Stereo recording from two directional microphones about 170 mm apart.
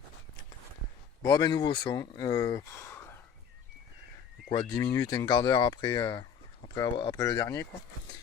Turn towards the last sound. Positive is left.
turn(degrees=20)  # may be behind; listen again after turning